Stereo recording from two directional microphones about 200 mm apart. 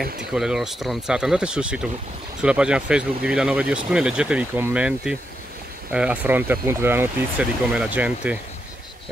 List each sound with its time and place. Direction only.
0.3 s speech: 5° right (ahead or behind)